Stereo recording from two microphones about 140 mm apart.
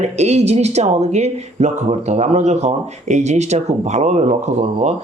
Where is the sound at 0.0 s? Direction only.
50° right (ahead or behind).